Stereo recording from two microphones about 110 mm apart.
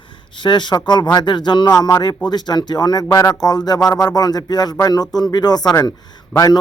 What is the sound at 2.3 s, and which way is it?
Speech, 40° left (ahead or behind).